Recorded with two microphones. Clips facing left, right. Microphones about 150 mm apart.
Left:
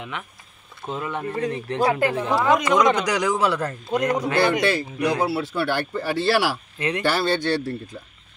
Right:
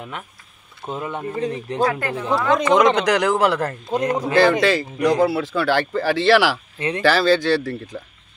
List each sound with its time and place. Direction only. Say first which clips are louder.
0.9 s speech: right 1 dB; 20° right (ahead or behind)
1.9 s speech: left 3 dB; 25° left (ahead or behind)
2.5 s speech: right 4 dB; 30° right (ahead or behind)
3.1 s a man's voice: right 4 dB; 55° right (ahead or behind)
3.9 s speech: even; 25° right (ahead or behind)
4.4 s speech: right 6 dB; 90° right